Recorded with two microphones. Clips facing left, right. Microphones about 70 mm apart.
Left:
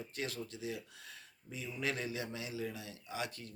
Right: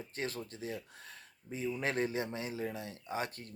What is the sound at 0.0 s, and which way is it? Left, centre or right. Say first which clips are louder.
Speech: right 2 dB; right.